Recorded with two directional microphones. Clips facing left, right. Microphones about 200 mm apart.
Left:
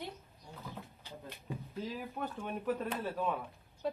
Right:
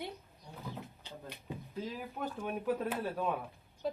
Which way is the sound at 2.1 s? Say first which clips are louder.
Right 1 dB; 5° right (ahead or behind).